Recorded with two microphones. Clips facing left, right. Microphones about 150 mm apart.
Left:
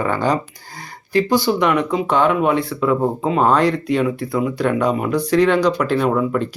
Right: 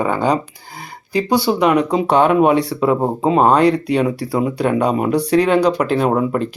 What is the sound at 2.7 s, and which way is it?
Speech, 30° right (ahead or behind).